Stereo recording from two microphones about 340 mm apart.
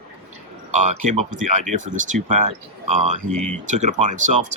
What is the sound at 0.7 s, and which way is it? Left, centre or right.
Speech, right.